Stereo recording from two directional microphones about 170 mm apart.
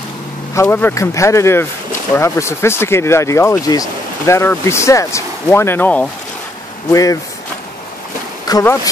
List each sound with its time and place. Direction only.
0.6 s speech: 15° left (ahead or behind)
6.9 s speech: 20° left (ahead or behind)
8.5 s speech: 20° left (ahead or behind)